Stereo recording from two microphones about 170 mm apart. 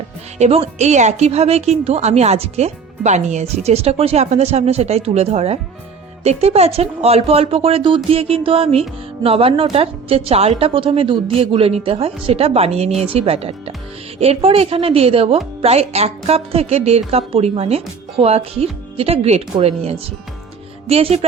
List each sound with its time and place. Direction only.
0.3 s speech: 40° right (ahead or behind)